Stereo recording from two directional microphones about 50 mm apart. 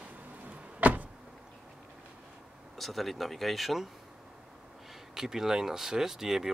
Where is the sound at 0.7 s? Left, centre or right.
Right.